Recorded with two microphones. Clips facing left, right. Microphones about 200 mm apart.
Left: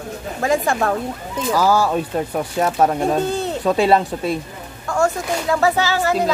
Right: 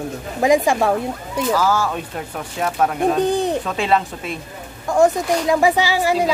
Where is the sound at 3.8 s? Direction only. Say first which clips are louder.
Left 6 dB; 35° left (ahead or behind).